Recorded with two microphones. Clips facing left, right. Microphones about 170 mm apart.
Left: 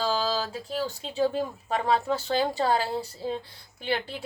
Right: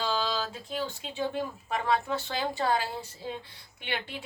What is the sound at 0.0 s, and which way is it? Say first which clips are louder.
A woman's voice: left 3 dB; 35° left (ahead or behind).